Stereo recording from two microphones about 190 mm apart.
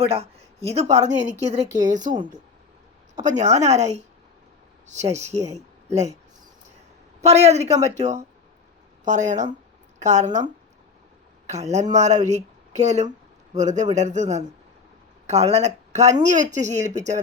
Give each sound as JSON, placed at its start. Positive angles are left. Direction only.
{"t": 0.0, "sound": "speech", "side_deg": -30}
{"t": 7.2, "sound": "speech", "side_deg": -35}
{"t": 11.4, "sound": "speech", "side_deg": -35}